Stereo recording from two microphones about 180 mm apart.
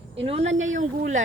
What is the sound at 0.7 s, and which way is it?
Speech, 45° right (ahead or behind).